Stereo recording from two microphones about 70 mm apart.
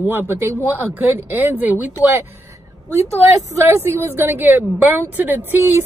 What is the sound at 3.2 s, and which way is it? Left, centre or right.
A woman's voice, right.